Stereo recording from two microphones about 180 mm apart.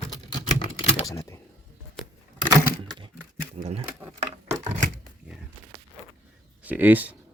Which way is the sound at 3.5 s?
35° right (ahead or behind).